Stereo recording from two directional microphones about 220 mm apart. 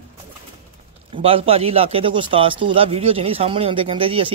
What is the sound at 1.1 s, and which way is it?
A man's voice, 25° right (ahead or behind).